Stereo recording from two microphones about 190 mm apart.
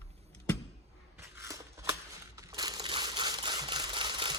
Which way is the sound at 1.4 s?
15° right (ahead or behind).